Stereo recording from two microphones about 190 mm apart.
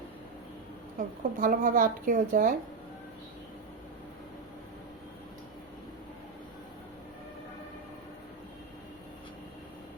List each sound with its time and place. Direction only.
0.9 s speech: 45° right (ahead or behind)